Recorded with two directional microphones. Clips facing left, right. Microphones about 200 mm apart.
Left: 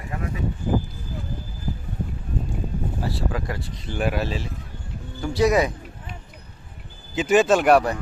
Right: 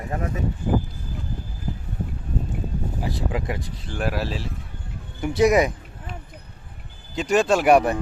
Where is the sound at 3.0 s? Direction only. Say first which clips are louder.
Right 2 dB; 20° right (ahead or behind).